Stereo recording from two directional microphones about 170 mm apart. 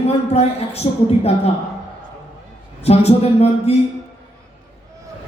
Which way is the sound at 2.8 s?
35° left (ahead or behind).